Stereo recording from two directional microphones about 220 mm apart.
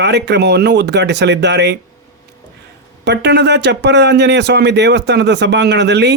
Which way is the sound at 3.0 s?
50° right (ahead or behind).